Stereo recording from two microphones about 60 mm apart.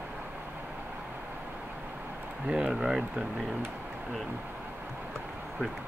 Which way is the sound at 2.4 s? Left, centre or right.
Centre.